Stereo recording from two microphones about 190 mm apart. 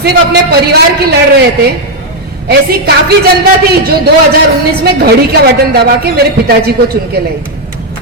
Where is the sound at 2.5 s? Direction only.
55° right (ahead or behind).